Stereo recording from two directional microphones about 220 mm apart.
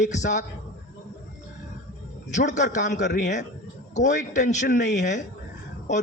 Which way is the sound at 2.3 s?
35° left (ahead or behind).